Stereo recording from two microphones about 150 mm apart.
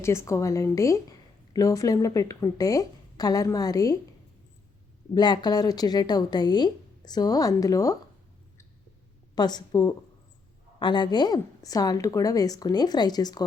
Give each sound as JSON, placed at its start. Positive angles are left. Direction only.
{"t": 0.0, "sound": "a woman's voice", "side_deg": 20}
{"t": 5.1, "sound": "a woman's voice", "side_deg": 30}
{"t": 9.3, "sound": "a woman's voice", "side_deg": 30}